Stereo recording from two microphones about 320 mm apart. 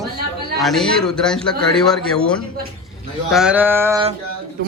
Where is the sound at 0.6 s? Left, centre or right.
Centre.